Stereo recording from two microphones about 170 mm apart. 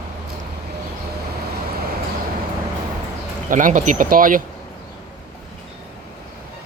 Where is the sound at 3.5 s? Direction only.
45° right (ahead or behind).